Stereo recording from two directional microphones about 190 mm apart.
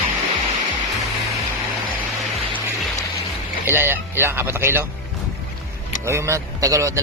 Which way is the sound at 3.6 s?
10° right (ahead or behind).